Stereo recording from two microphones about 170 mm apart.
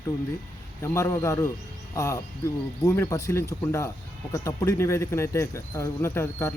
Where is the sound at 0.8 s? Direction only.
15° left (ahead or behind).